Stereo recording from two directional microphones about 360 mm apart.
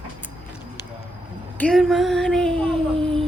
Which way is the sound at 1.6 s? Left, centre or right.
Centre.